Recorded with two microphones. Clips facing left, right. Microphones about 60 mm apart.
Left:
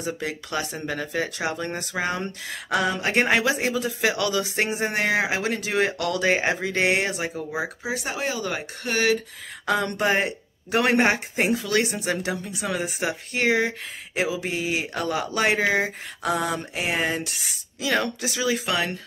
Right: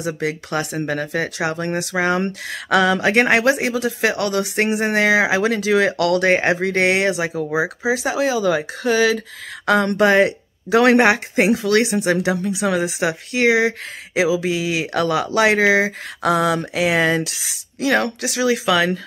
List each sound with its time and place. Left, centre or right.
0.0 s speech: right
4.1 s speech: right
6.2 s speech: right
9.7 s speech: right
17.7 s speech: right